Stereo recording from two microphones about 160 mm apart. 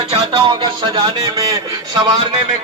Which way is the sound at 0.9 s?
20° right (ahead or behind).